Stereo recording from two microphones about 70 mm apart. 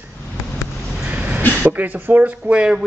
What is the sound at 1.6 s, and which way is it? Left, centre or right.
Speech, right.